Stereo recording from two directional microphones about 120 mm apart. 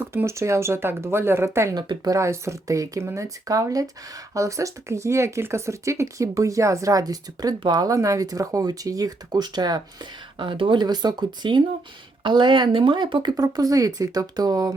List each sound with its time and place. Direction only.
0.0 s speech: 20° right (ahead or behind)